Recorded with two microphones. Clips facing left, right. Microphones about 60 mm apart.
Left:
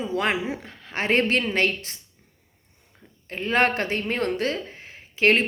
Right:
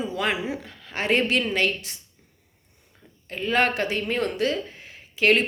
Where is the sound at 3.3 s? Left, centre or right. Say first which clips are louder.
Left 1 dB; left.